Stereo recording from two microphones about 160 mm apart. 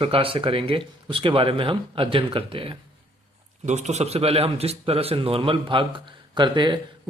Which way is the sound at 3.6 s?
45° right (ahead or behind).